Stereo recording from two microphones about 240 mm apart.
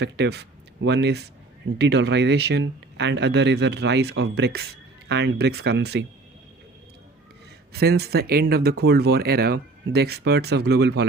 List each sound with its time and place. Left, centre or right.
0.0 s speech: right
7.7 s speech: right